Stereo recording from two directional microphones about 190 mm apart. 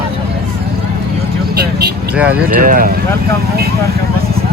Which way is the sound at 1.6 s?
55° right (ahead or behind).